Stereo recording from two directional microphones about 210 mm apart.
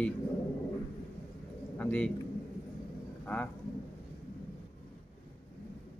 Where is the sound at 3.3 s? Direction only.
10° left (ahead or behind).